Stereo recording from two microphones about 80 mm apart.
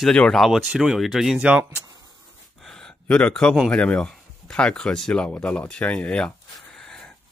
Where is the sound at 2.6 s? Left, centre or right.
Centre.